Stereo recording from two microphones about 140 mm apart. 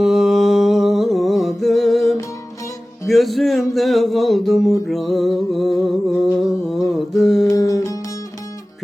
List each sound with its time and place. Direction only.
0.0 s a sound: centre (ahead or behind)
4.9 s music: centre (ahead or behind)
6.7 s mantra: centre (ahead or behind)
7.4 s music: 25° left (ahead or behind)